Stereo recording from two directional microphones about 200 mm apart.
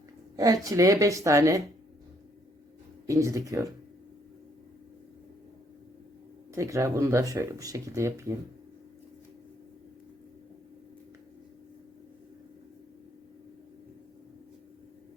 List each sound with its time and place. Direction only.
0.3 s speech: 20° right (ahead or behind)
3.1 s speech: 15° right (ahead or behind)
6.5 s speech: 15° right (ahead or behind)